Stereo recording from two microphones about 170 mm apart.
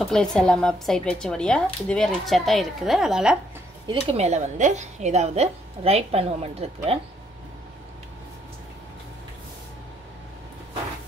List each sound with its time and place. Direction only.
0.0 s speech: 5° left (ahead or behind)
3.8 s a woman's voice: 30° right (ahead or behind)